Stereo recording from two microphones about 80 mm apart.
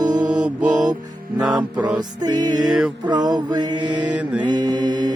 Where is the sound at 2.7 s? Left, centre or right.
Centre.